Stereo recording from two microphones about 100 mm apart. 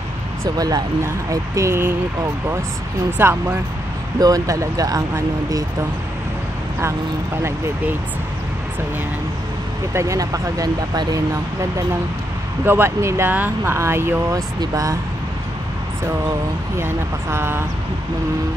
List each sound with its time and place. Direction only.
0.6 s speech: 40° right (ahead or behind)
3.2 s speech: 20° right (ahead or behind)
4.2 s speech: 35° right (ahead or behind)
9.9 s speech: 35° right (ahead or behind)
12.6 s speech: 25° right (ahead or behind)
14.6 s speech: 35° right (ahead or behind)
16.7 s speech: 25° right (ahead or behind)